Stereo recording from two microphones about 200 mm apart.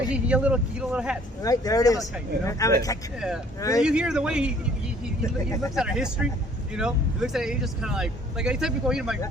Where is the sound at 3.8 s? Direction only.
5° right (ahead or behind).